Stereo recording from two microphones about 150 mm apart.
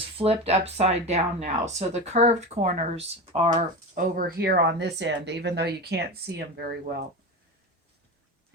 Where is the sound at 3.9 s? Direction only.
70° right (ahead or behind); by 6.7 s 90° right.